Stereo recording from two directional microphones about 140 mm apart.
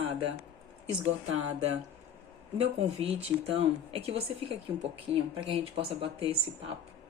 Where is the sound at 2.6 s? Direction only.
45° right (ahead or behind).